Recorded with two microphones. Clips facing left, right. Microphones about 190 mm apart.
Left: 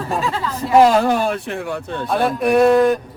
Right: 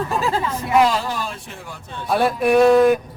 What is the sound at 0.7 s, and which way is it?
Speech, 50° left (ahead or behind).